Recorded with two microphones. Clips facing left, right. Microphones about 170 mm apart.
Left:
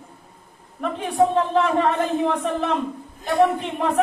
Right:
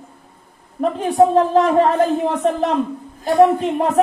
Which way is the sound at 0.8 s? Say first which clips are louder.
Right 5 dB; 35° right (ahead or behind).